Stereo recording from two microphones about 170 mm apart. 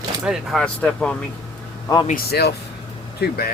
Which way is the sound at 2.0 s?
65° left (ahead or behind).